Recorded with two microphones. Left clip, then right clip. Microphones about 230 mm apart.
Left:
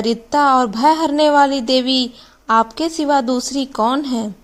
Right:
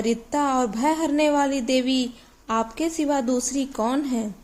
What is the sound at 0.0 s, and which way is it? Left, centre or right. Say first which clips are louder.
A woman's voice: left 8 dB; left.